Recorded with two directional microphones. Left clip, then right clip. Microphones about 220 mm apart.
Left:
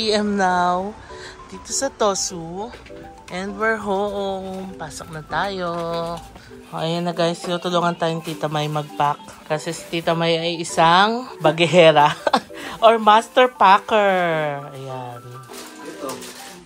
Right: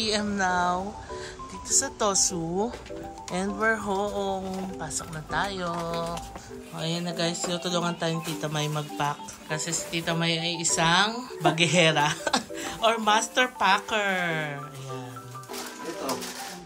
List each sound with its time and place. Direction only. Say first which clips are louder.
0.0 s speech: left 7 dB; 5° right (ahead or behind)